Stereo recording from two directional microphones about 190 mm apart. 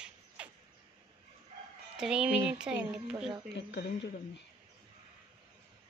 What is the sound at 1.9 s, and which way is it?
Speech, 5° right (ahead or behind).